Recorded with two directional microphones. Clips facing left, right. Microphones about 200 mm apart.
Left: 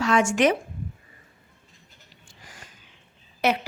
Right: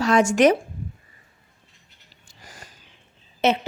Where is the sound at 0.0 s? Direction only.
40° right (ahead or behind).